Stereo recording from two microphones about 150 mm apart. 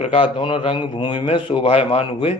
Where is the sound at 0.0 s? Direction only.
40° left (ahead or behind).